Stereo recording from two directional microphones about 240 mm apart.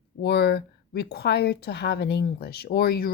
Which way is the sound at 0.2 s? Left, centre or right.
Left.